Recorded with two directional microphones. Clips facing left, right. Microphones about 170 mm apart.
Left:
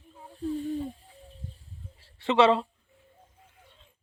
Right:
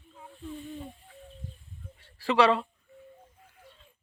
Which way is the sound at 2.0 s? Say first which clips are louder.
Left 2 dB; 25° left (ahead or behind).